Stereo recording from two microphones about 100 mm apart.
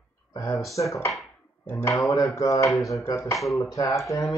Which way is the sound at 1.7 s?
25° left (ahead or behind).